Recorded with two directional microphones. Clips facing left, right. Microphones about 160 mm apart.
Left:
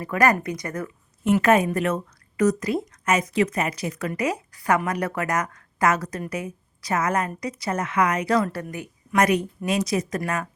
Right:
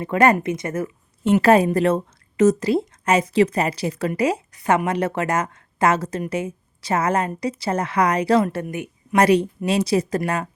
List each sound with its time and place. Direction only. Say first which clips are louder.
0.0 s speech: right 4 dB; 25° right (ahead or behind)